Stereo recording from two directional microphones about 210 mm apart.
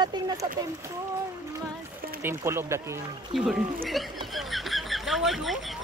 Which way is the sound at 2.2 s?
10° right (ahead or behind).